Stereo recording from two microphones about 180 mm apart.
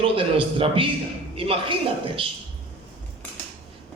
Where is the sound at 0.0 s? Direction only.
30° right (ahead or behind).